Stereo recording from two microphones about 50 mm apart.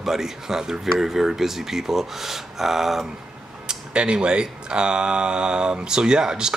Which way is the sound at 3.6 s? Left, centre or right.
Centre.